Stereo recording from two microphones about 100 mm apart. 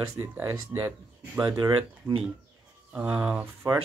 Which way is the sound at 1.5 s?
40° right (ahead or behind).